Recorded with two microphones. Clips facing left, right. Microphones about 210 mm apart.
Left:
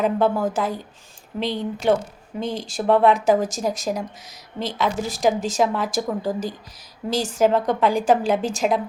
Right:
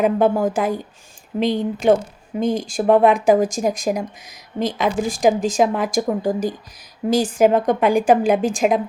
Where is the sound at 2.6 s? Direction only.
15° right (ahead or behind).